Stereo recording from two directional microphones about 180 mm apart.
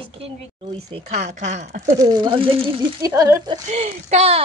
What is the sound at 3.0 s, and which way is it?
Speech, 15° right (ahead or behind).